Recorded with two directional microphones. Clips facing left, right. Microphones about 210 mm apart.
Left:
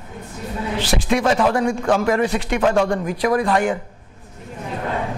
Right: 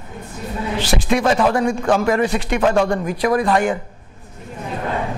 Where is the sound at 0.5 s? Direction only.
20° right (ahead or behind).